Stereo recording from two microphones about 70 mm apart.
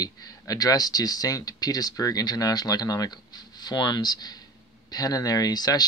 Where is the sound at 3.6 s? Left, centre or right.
Left.